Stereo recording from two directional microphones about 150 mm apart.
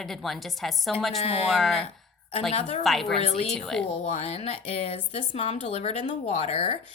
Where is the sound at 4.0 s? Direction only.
45° left (ahead or behind).